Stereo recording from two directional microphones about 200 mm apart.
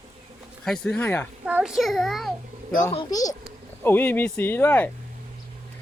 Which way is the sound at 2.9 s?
20° left (ahead or behind).